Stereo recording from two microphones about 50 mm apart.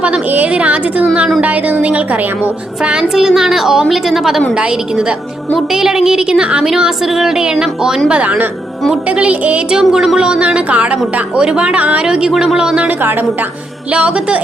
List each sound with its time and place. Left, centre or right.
0.0 s a woman's voice: right
3.0 s a woman's voice: centre
4.5 s a woman's voice: centre
8.1 s a woman's voice: right
9.7 s a woman's voice: centre; by 12.0 s right
12.0 s a woman's voice: centre
13.9 s a woman's voice: right